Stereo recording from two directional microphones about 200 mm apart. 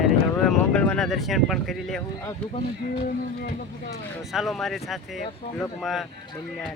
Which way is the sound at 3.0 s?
45° left (ahead or behind).